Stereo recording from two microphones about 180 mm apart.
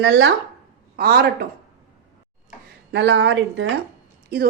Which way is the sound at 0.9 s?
55° right (ahead or behind).